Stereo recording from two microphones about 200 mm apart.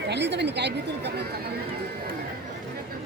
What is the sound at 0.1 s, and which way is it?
Speech, 60° right (ahead or behind).